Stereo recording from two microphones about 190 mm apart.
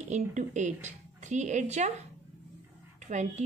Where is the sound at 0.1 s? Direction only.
40° right (ahead or behind).